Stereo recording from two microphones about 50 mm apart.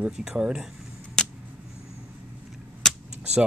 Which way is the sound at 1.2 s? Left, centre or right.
Centre.